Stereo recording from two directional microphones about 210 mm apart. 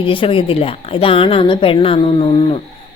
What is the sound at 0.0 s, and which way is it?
A woman's voice, 25° left (ahead or behind).